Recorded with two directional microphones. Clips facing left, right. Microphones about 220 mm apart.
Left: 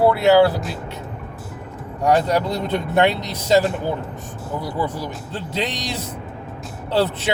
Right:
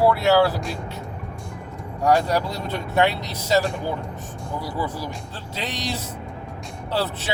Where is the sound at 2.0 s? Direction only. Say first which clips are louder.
Left 2 dB; 20° left (ahead or behind).